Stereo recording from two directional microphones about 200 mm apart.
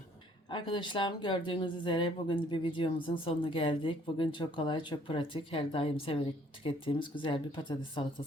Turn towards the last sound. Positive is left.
turn(degrees=25)  # may be behind; listen again after turning